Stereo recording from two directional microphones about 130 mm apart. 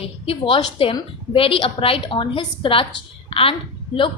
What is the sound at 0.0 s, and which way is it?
A woman's voice, 45° left (ahead or behind).